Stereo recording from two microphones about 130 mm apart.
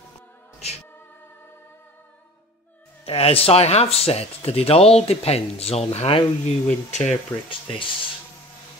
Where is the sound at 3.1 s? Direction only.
50° left (ahead or behind).